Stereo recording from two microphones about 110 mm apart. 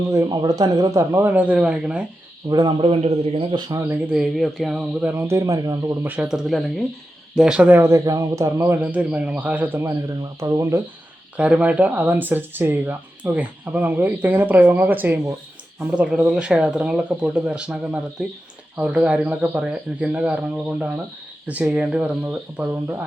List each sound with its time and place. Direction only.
0.1 s speech: 35° right (ahead or behind)
1.2 s speech: 15° right (ahead or behind)
2.5 s a man's voice: 40° right (ahead or behind); by 3.4 s 65° right (ahead or behind)
3.7 s speech: 20° right (ahead or behind)
6.0 s speech: 15° right (ahead or behind)
6.2 s speech: 5° right (ahead or behind)
7.8 s a man's voice: 25° right (ahead or behind)
8.8 s speech: 15° right (ahead or behind)
10.4 s a man's voice: 30° right (ahead or behind)
11.3 s speech: 10° right (ahead or behind)
18.8 s speech: 10° right (ahead or behind)